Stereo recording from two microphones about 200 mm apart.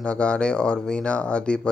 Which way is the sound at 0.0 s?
5° left (ahead or behind).